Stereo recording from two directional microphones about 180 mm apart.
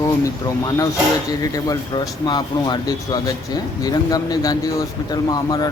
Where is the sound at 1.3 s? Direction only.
20° left (ahead or behind).